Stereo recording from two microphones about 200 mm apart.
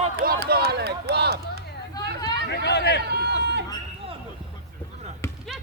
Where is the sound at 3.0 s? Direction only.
55° right (ahead or behind).